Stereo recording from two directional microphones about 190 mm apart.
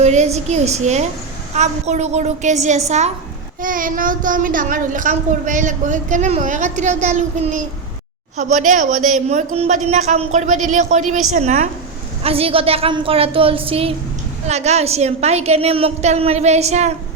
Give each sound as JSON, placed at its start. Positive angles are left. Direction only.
{"t": 0.0, "sound": "a child's voice", "side_deg": -35}